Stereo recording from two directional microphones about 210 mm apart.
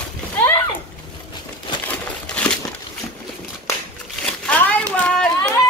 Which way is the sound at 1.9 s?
5° left (ahead or behind).